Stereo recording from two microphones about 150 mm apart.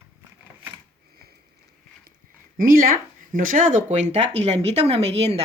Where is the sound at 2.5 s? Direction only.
70° right (ahead or behind).